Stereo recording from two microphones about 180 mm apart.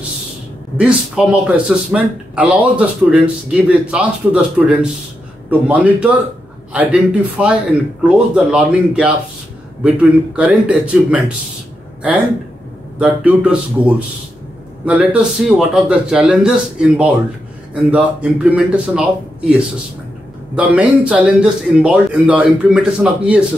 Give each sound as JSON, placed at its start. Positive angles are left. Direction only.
{"t": 0.7, "sound": "a man's voice", "side_deg": -5}
{"t": 13.0, "sound": "a man's voice", "side_deg": -5}
{"t": 20.5, "sound": "speech", "side_deg": -5}